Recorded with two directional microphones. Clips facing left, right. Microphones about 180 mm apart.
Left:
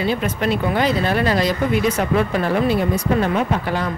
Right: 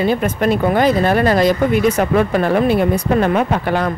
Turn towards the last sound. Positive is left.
turn(degrees=-60)  # may be behind; listen again after turning